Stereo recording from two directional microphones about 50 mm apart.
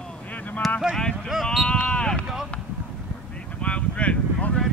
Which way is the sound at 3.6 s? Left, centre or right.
Left.